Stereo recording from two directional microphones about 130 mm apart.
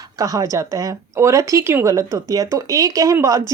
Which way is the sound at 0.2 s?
25° right (ahead or behind).